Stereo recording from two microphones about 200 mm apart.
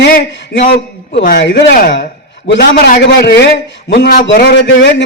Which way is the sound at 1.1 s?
40° left (ahead or behind).